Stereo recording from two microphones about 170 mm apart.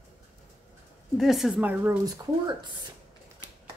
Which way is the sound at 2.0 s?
20° right (ahead or behind).